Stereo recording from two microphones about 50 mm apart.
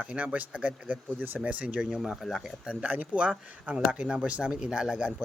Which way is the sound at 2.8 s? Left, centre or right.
Right.